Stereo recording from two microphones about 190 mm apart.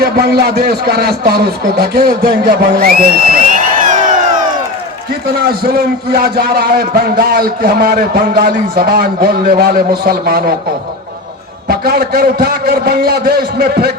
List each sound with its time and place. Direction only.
0.0 s a man's voice: 55° right (ahead or behind)
2.7 s music: 50° right (ahead or behind)
5.2 s a man's voice: 55° right (ahead or behind)
11.7 s a man's voice: 55° right (ahead or behind)